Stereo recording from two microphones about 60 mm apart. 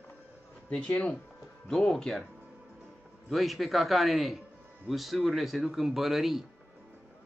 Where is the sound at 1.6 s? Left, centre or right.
Centre.